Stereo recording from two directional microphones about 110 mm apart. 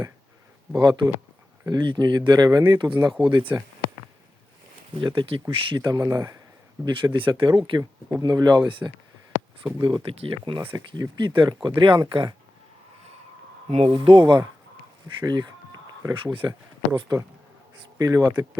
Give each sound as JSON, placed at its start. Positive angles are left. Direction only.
{"t": 0.7, "sound": "speech", "side_deg": -40}
{"t": 4.9, "sound": "speech", "side_deg": -50}
{"t": 5.7, "sound": "speech", "side_deg": -35}
{"t": 6.8, "sound": "speech", "side_deg": -45}
{"t": 10.8, "sound": "speech", "side_deg": -35}
{"t": 13.7, "sound": "speech", "side_deg": -70}
{"t": 15.0, "sound": "speech", "side_deg": -35}
{"t": 16.1, "sound": "speech", "side_deg": -50}